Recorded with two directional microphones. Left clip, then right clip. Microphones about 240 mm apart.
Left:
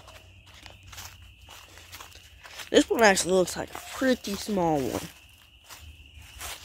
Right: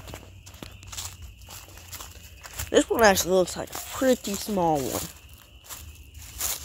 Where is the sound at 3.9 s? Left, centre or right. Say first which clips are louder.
Right 3 dB; centre.